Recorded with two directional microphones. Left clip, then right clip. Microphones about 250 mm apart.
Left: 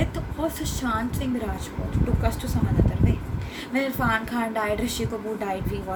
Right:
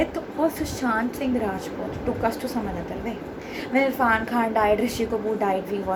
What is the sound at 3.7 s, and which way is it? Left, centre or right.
A woman's voice, centre.